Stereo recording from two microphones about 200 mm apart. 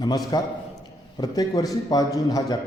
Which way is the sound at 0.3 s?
20° left (ahead or behind).